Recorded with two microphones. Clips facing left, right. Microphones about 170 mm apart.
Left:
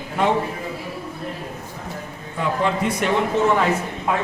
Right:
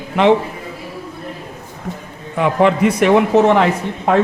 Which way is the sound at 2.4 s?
75° right (ahead or behind).